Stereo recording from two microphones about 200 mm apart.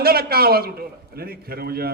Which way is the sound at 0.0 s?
50° right (ahead or behind).